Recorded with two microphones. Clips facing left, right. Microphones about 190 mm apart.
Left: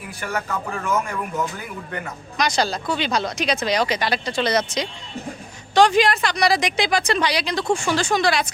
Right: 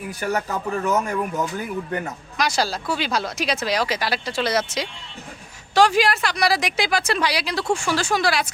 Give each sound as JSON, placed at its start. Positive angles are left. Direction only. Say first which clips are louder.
{"t": 0.2, "sound": "speech", "louder": "right 2 dB", "side_deg": -40}
{"t": 2.4, "sound": "a woman's voice", "louder": "left 1 dB", "side_deg": -5}